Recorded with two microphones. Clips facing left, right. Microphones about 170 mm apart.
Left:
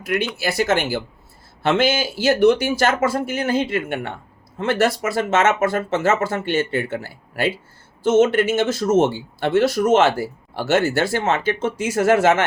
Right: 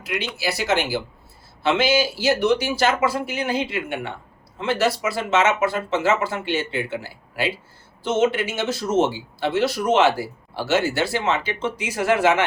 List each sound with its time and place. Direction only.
0.0 s speech: 50° left (ahead or behind)